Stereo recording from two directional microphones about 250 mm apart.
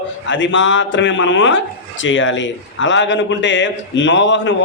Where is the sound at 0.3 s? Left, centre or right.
Left.